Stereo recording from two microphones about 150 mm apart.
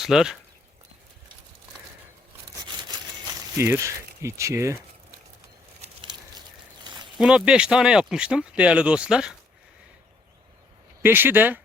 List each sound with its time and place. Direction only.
0.0 s speech: 5° right (ahead or behind)
3.2 s speech: 15° right (ahead or behind)
6.0 s a sound: 30° right (ahead or behind)
7.2 s speech: 5° right (ahead or behind)
11.0 s speech: 15° right (ahead or behind)